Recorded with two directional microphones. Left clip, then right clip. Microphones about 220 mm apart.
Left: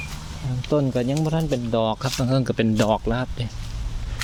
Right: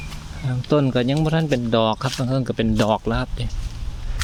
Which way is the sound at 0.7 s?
30° right (ahead or behind).